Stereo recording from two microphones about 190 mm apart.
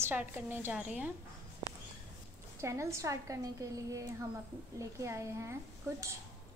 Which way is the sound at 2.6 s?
15° right (ahead or behind).